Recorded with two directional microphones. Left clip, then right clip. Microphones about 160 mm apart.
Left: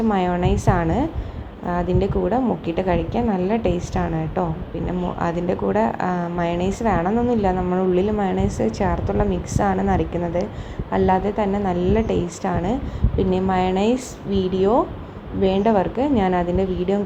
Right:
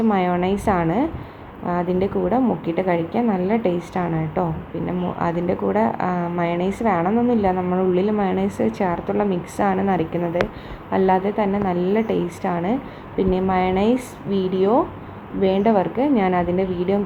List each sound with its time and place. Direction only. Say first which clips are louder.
0.1 s a woman's voice: right 1 dB; 10° left (ahead or behind)